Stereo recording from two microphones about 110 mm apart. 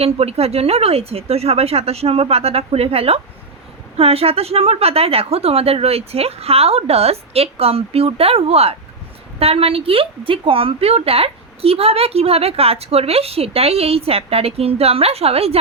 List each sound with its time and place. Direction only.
0.0 s a woman's voice: 65° right (ahead or behind)